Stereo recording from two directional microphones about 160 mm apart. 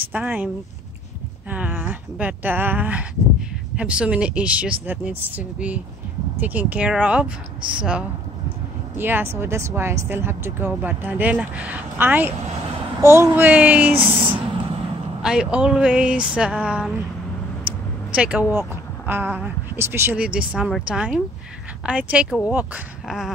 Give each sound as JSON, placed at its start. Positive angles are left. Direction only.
{"t": 0.1, "sound": "speech", "side_deg": -10}
{"t": 1.5, "sound": "speech", "side_deg": -10}
{"t": 8.9, "sound": "speech", "side_deg": -15}
{"t": 14.2, "sound": "a sound", "side_deg": -30}
{"t": 15.2, "sound": "speech", "side_deg": -5}
{"t": 17.6, "sound": "vehicle", "side_deg": -5}
{"t": 18.5, "sound": "speech", "side_deg": -15}